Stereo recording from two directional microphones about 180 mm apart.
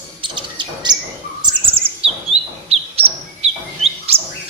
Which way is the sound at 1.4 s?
30° right (ahead or behind).